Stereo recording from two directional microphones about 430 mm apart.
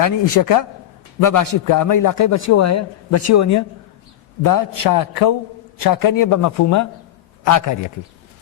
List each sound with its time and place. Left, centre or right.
0.0 s a man's voice: left
4.4 s speech: left